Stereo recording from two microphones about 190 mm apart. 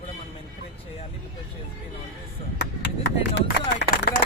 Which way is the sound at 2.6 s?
60° left (ahead or behind).